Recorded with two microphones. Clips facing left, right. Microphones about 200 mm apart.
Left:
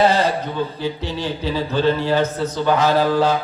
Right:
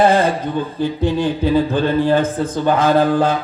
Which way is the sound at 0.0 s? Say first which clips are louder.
Right 3 dB; 50° right (ahead or behind).